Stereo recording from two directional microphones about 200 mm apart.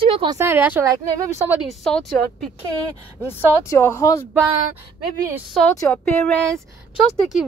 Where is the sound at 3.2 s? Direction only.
10° left (ahead or behind).